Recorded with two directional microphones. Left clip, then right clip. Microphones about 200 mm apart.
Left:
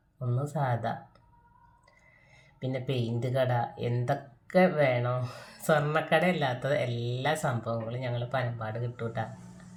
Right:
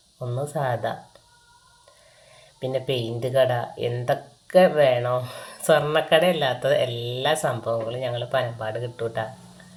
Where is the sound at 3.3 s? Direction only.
10° left (ahead or behind).